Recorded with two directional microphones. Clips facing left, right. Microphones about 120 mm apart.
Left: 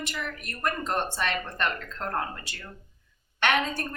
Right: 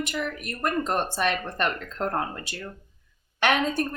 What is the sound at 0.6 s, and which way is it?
A woman's voice, 15° right (ahead or behind).